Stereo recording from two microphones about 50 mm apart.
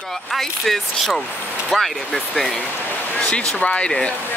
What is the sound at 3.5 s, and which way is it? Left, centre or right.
Speech, left.